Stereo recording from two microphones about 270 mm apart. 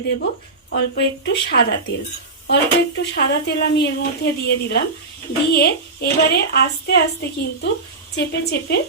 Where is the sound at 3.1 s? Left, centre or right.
Left.